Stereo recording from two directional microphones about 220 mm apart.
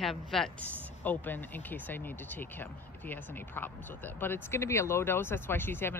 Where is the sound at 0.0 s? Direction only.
Centre (ahead or behind).